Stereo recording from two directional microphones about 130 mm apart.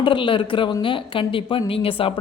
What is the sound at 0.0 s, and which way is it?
Speech, 40° left (ahead or behind).